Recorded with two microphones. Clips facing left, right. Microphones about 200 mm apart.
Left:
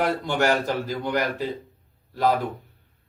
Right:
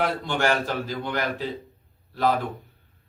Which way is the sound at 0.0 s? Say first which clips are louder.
Left 2 dB; 10° left (ahead or behind).